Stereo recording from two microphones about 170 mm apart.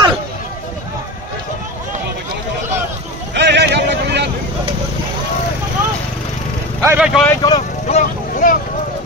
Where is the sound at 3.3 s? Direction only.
90° right.